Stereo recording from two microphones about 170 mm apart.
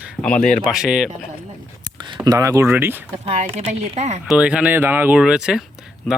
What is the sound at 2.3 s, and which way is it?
Speech, 20° right (ahead or behind).